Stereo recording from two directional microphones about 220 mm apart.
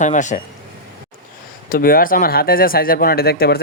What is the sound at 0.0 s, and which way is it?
Speech, 35° left (ahead or behind).